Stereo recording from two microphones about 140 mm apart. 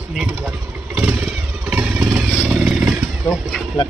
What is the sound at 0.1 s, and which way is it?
Motorcycle, 5° right (ahead or behind).